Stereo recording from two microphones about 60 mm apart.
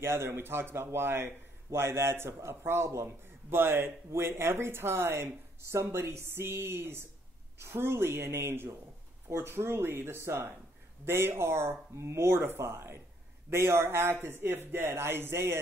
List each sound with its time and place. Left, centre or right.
0.0 s a man's voice: right